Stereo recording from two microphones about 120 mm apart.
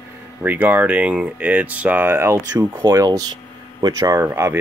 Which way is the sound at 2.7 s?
35° right (ahead or behind).